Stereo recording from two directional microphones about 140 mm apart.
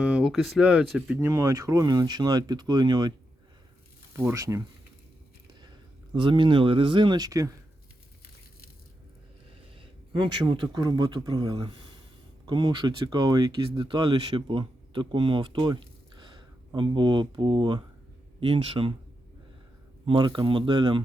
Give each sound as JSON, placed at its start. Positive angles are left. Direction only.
{"t": 0.0, "sound": "speech", "side_deg": -10}
{"t": 1.3, "sound": "speech", "side_deg": -20}
{"t": 4.1, "sound": "speech", "side_deg": -20}
{"t": 6.1, "sound": "speech", "side_deg": -35}
{"t": 10.1, "sound": "speech", "side_deg": -30}
{"t": 20.1, "sound": "speech", "side_deg": -35}